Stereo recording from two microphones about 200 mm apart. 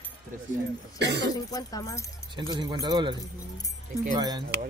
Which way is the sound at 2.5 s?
20° right (ahead or behind).